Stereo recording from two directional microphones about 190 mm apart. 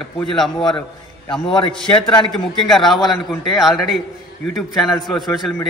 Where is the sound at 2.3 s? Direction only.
Centre (ahead or behind).